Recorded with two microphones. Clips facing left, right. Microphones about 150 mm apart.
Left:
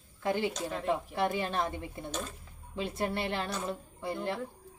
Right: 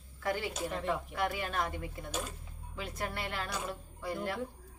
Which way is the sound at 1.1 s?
25° left (ahead or behind).